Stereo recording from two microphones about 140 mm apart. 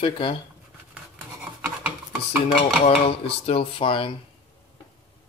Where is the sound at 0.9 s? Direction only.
10° right (ahead or behind).